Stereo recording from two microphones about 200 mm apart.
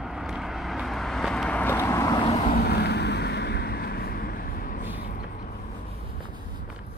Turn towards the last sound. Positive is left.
turn(degrees=45)  # may be behind; listen again after turning